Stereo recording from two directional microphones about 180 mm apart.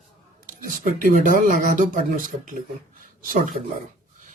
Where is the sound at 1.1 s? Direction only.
45° right (ahead or behind).